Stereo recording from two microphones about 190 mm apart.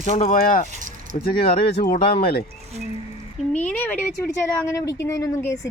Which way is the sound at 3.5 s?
10° left (ahead or behind).